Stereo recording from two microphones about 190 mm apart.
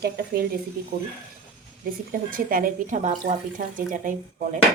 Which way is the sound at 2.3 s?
50° right (ahead or behind).